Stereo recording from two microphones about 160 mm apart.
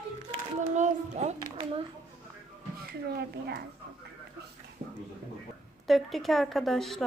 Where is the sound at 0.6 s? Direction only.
50° right (ahead or behind).